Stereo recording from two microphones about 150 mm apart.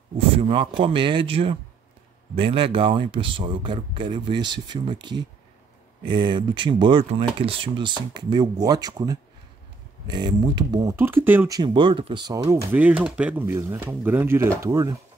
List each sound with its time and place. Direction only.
0.4 s speech: 35° right (ahead or behind); by 11.5 s 15° right (ahead or behind)
11.5 s speech: 30° right (ahead or behind)
12.7 s speech: 10° right (ahead or behind)